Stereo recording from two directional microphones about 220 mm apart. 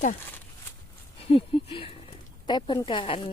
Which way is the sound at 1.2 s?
25° left (ahead or behind).